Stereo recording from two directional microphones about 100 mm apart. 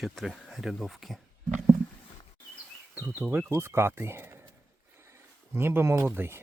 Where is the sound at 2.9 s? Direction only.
20° right (ahead or behind).